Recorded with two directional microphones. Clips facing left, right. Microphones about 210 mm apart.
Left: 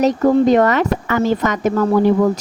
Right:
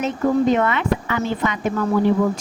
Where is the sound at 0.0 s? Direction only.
35° left (ahead or behind).